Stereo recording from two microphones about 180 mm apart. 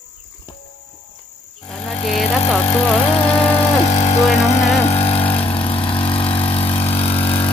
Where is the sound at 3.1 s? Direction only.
30° left (ahead or behind).